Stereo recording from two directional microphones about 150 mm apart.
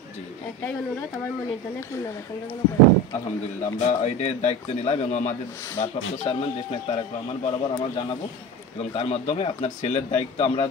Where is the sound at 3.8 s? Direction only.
45° left (ahead or behind).